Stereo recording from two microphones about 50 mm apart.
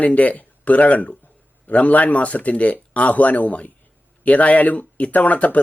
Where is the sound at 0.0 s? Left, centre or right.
Left.